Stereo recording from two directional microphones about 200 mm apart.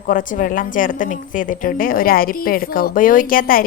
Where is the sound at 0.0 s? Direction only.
45° left (ahead or behind).